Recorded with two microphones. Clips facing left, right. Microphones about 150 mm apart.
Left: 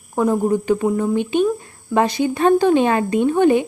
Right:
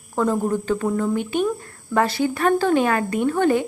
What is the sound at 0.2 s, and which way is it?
Speech, 15° left (ahead or behind).